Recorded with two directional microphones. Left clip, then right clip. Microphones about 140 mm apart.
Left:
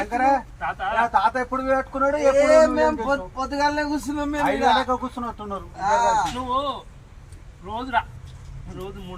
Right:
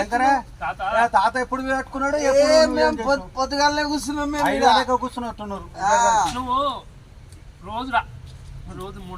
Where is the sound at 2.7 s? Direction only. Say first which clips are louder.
Right 1 dB; 20° left (ahead or behind).